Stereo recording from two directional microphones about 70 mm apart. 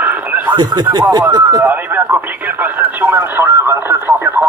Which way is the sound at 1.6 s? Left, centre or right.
Right.